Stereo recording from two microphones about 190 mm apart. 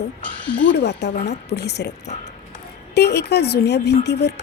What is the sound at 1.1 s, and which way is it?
Speech, 35° left (ahead or behind).